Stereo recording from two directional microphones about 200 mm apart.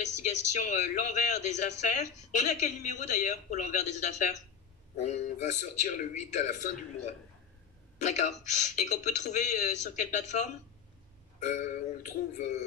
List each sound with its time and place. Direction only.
0.2 s a man's voice: 40° left (ahead or behind)
8.0 s a man's voice: 35° left (ahead or behind)